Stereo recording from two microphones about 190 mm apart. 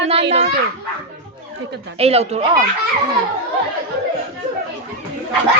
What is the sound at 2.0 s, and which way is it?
Speech, 30° right (ahead or behind).